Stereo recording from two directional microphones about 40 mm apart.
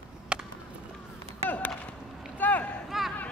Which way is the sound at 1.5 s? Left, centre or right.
Left.